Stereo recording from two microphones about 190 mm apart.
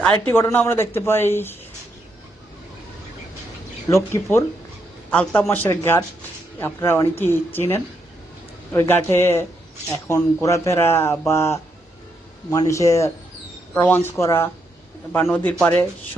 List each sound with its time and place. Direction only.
0.3 s speech: 10° left (ahead or behind)
3.8 s speech: 15° left (ahead or behind)